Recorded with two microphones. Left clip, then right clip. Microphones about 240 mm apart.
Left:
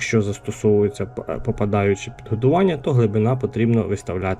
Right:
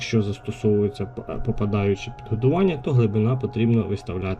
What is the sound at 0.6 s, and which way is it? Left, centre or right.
Speech, centre.